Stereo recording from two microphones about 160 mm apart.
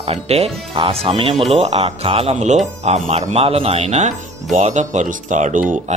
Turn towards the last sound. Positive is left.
turn(degrees=-55)  # may be behind; listen again after turning